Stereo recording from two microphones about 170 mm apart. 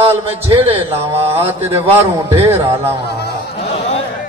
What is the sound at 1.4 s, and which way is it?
Speech, 15° right (ahead or behind).